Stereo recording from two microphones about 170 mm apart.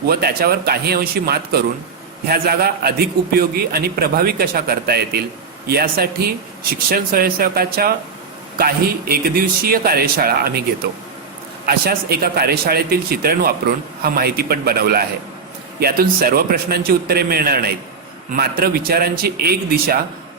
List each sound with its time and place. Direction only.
0.1 s speech: 65° right (ahead or behind)
11.6 s speech: 65° right (ahead or behind)